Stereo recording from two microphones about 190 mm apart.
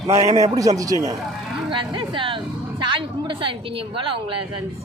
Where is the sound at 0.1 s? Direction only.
35° right (ahead or behind).